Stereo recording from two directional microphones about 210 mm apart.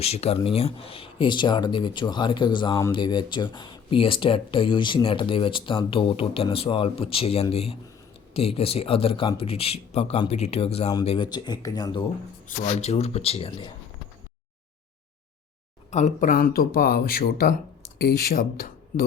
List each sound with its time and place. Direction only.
0.0 s speech: 30° left (ahead or behind)
12.5 s speech: 30° left (ahead or behind)
15.9 s speech: 35° left (ahead or behind)